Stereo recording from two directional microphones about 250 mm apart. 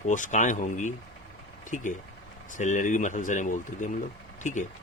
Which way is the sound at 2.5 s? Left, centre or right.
Left.